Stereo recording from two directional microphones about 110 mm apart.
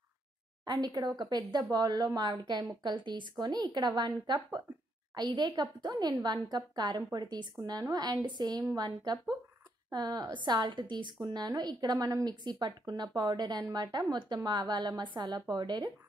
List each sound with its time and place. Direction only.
0.7 s a woman's voice: 40° right (ahead or behind)